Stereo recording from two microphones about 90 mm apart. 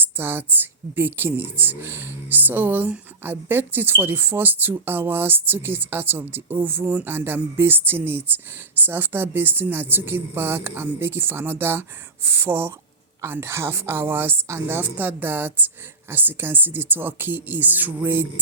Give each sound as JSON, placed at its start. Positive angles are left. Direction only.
{"t": 0.0, "sound": "a woman's voice", "side_deg": -25}